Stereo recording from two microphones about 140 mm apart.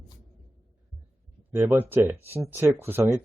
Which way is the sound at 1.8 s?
15° right (ahead or behind).